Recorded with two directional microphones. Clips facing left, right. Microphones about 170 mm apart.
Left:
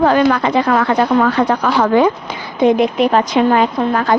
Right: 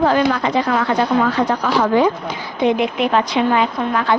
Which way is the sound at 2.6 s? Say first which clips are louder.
Left 5 dB; 40° left (ahead or behind).